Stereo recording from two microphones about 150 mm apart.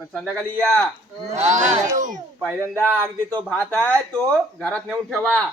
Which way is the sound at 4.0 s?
5° left (ahead or behind).